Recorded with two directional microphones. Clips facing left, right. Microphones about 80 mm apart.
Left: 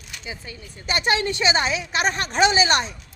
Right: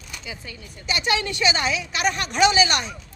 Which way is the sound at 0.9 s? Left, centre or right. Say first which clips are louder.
Left 2 dB; left.